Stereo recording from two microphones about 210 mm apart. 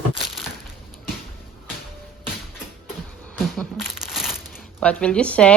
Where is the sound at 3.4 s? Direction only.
Centre (ahead or behind).